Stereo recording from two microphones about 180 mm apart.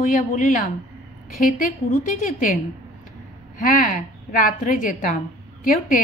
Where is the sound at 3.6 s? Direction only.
50° left (ahead or behind).